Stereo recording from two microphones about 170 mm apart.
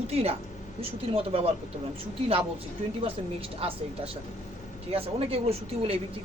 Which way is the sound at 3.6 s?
35° right (ahead or behind).